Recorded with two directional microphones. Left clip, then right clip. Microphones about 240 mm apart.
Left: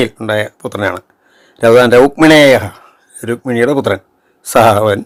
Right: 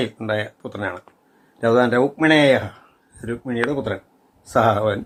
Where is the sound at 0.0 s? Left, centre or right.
Left.